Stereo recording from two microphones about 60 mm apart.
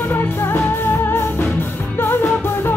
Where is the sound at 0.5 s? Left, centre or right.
Left.